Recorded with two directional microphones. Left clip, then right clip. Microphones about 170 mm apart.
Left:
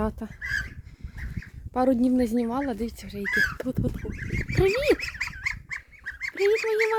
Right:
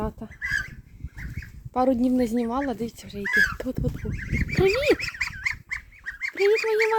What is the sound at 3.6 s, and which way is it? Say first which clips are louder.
Speech: even; 15° left (ahead or behind).